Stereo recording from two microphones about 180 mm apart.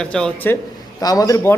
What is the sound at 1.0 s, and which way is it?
Speech, 20° left (ahead or behind).